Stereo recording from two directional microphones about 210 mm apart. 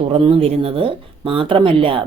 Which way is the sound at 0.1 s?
25° right (ahead or behind).